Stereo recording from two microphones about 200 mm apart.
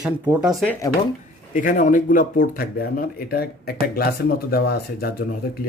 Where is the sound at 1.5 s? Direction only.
40° left (ahead or behind).